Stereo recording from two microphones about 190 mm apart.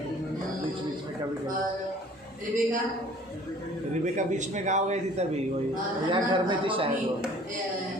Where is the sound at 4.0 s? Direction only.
40° right (ahead or behind).